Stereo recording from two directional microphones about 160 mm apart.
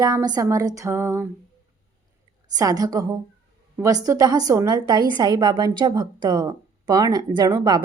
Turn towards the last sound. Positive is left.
turn(degrees=-25)  # may be behind; listen again after turning